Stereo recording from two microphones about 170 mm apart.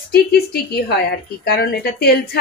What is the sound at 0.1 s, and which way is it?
A woman's voice, 65° left (ahead or behind).